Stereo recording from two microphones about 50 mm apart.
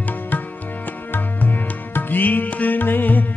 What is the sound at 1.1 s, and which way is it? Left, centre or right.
Music, left.